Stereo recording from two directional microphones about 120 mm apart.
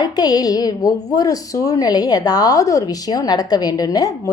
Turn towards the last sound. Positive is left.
turn(degrees=30)  # may be behind; listen again after turning